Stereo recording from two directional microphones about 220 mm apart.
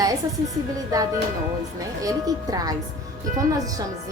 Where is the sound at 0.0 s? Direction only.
15° right (ahead or behind).